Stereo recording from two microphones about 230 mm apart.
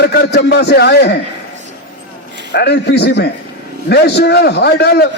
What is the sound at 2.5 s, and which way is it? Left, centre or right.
A man's voice, left.